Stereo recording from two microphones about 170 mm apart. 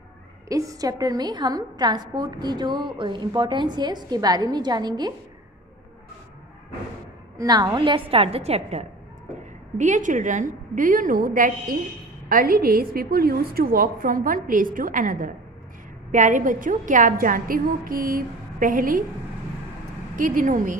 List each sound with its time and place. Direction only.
0.5 s a woman's voice: 20° right (ahead or behind)
7.3 s a woman's voice: 25° right (ahead or behind); by 19.0 s 55° right (ahead or behind)
20.2 s a woman's voice: 50° right (ahead or behind)